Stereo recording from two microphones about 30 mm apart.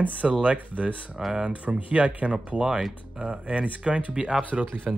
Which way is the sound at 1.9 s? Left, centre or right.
Right.